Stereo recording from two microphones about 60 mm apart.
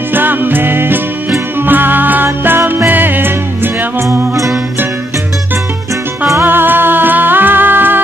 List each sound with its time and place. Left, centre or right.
0.1 s music: right
6.4 s music: right